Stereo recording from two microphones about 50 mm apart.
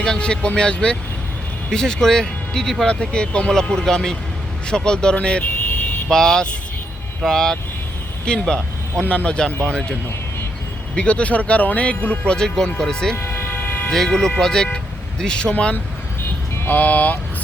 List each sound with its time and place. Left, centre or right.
0.0 s speech: centre
6.1 s speech: centre
9.0 s speech: left
13.1 s vehicle: left
13.9 s speech: centre
16.6 s speech: left